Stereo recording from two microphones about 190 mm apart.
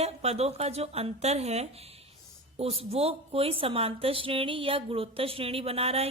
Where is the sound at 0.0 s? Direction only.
35° right (ahead or behind).